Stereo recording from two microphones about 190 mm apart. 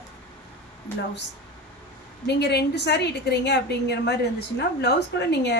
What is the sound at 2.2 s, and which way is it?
A woman's voice, 60° left (ahead or behind).